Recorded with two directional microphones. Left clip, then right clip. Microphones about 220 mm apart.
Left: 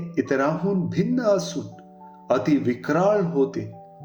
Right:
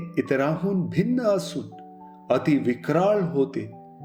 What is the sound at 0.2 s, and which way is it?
Speech, 35° right (ahead or behind).